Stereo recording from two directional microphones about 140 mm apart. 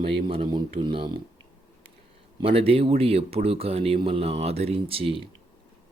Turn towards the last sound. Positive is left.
turn(degrees=-40)  # may be behind; listen again after turning